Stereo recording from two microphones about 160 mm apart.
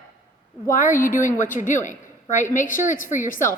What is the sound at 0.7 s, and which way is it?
A woman's voice, 55° left (ahead or behind).